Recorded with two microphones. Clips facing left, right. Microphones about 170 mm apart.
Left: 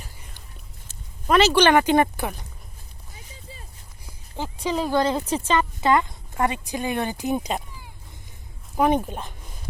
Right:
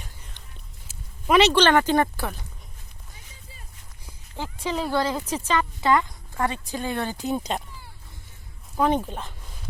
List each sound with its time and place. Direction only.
0.0 s music: 10° left (ahead or behind)
0.9 s a sound: centre (ahead or behind)
1.5 s speech: 15° left (ahead or behind)
4.0 s speech: 15° left (ahead or behind)